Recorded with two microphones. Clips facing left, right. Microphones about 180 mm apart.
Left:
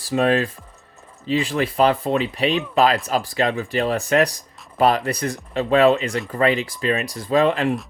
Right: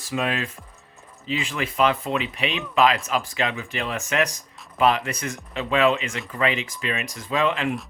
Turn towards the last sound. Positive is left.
turn(degrees=40)  # may be behind; listen again after turning